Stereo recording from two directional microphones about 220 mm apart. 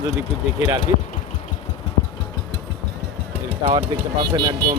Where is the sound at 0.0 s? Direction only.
15° right (ahead or behind).